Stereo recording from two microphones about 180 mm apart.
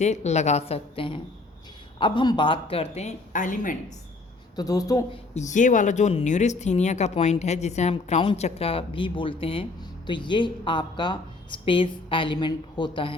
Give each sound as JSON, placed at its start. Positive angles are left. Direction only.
{"t": 0.0, "sound": "speech", "side_deg": 40}
{"t": 4.5, "sound": "speech", "side_deg": 20}
{"t": 5.3, "sound": "speech", "side_deg": 40}